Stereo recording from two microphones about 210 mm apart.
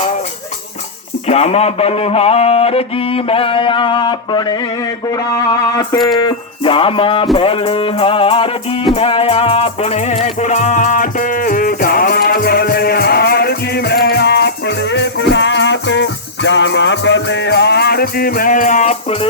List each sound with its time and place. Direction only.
1.3 s a man's voice: 30° left (ahead or behind)
6.2 s music: 25° left (ahead or behind)